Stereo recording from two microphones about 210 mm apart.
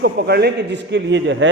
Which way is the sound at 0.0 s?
50° right (ahead or behind).